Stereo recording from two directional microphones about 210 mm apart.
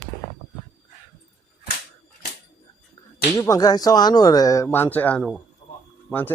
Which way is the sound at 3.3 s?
15° left (ahead or behind).